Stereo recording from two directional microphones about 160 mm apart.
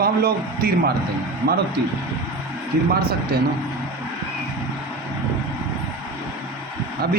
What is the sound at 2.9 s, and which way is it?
Speech, 75° right (ahead or behind).